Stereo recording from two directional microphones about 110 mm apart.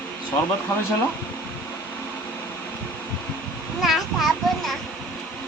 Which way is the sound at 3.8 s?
Centre (ahead or behind).